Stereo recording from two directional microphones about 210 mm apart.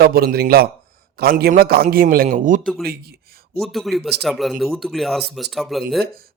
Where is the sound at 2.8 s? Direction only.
45° right (ahead or behind).